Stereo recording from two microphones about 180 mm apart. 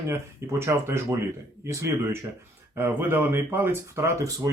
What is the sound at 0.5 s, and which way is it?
Speech, 15° right (ahead or behind).